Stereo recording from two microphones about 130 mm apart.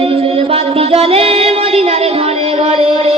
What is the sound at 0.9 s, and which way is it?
Music, 45° right (ahead or behind).